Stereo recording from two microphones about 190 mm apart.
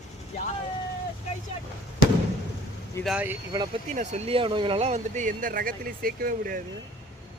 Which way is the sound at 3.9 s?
40° right (ahead or behind).